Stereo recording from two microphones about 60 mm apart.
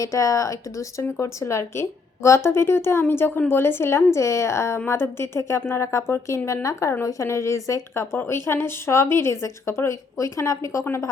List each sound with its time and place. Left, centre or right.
0.0 s a woman's voice: left